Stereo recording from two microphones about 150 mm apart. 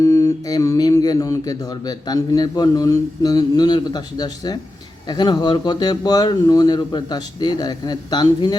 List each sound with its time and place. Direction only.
0.0 s mantra: 25° left (ahead or behind)
5.0 s speech: 30° left (ahead or behind)